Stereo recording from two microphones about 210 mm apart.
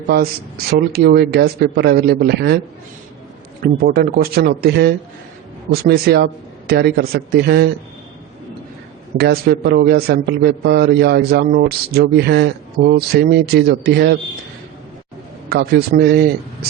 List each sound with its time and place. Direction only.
0.1 s a man's voice: 45° right (ahead or behind)
3.6 s a man's voice: 45° right (ahead or behind)
9.1 s a man's voice: 50° right (ahead or behind)
15.4 s a man's voice: 50° right (ahead or behind)